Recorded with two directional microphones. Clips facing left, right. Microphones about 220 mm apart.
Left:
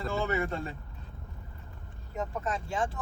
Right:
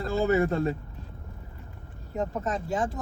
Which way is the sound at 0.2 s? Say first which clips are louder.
Right 9 dB; 40° right (ahead or behind).